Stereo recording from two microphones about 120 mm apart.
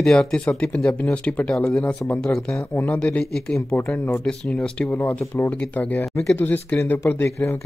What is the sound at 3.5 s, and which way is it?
Speech, 20° left (ahead or behind).